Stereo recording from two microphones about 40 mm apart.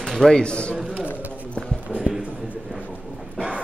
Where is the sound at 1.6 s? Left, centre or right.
Left.